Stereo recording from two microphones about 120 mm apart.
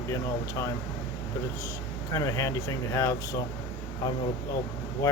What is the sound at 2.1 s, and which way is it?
A man's voice, 25° left (ahead or behind).